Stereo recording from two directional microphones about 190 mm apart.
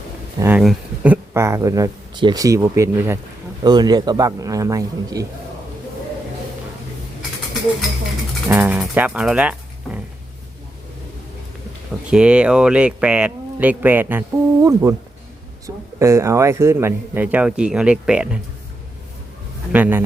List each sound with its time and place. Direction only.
0.3 s a man's voice: 10° right (ahead or behind)
8.4 s speech: 10° right (ahead or behind)
12.1 s speech: 5° right (ahead or behind)
19.7 s speech: 10° right (ahead or behind)